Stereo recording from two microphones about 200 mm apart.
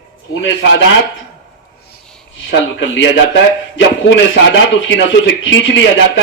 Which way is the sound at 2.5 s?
65° left (ahead or behind).